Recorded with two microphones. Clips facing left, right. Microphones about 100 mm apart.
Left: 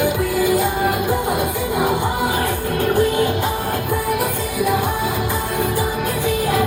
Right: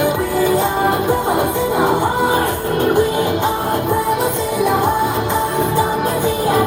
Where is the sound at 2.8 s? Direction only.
20° right (ahead or behind).